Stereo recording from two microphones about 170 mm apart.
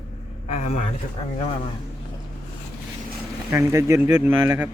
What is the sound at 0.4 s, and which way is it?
Speech, 40° left (ahead or behind).